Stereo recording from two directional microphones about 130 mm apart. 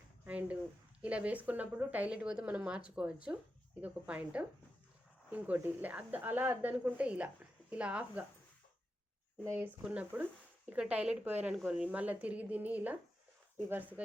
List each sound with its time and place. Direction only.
0.3 s a sound: 10° right (ahead or behind)
1.0 s speech: 10° right (ahead or behind)
9.4 s speech: 20° right (ahead or behind)
9.8 s speech: 10° right (ahead or behind)